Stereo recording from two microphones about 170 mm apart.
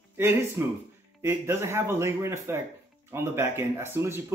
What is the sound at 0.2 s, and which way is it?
Speech, 15° right (ahead or behind).